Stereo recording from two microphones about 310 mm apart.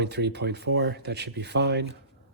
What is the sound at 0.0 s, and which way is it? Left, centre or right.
Speech, right.